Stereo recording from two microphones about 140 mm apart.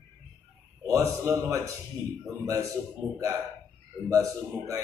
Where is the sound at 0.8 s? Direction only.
20° right (ahead or behind).